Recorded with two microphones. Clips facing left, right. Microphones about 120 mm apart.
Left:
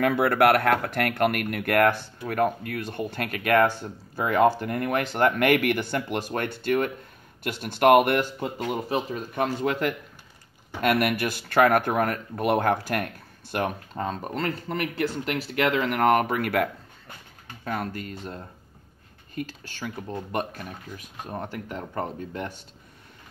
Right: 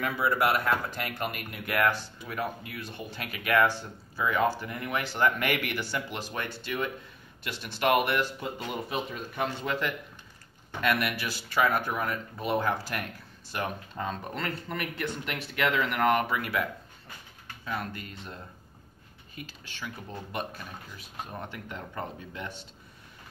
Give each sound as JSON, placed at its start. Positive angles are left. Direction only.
{"t": 0.0, "sound": "speech", "side_deg": 65}
{"t": 17.6, "sound": "speech", "side_deg": 40}